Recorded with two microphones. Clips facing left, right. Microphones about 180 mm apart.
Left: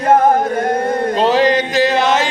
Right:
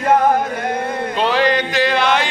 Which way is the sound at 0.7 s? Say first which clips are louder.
Left 5 dB; 40° left (ahead or behind).